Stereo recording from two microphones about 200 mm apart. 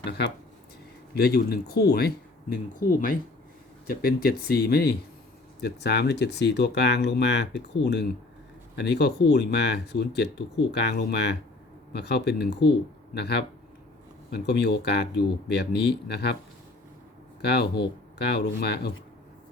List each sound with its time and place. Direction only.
0.0 s speech: 55° left (ahead or behind)
3.8 s speech: 50° left (ahead or behind)
17.4 s speech: 55° left (ahead or behind)